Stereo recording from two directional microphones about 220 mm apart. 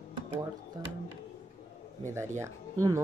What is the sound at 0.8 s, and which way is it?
Speech, 15° right (ahead or behind).